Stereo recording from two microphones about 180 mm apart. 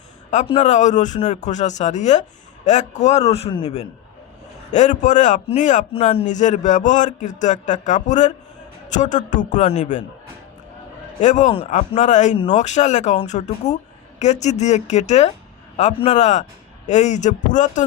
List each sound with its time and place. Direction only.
0.6 s a man's voice: 40° left (ahead or behind)
11.2 s a man's voice: 40° left (ahead or behind)